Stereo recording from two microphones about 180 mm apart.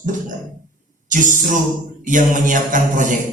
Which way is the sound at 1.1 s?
45° right (ahead or behind).